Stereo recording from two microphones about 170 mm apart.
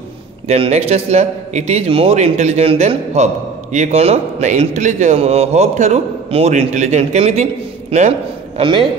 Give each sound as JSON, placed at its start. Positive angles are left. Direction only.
{"t": 0.5, "sound": "a man's voice", "side_deg": -40}
{"t": 8.5, "sound": "a man's voice", "side_deg": -30}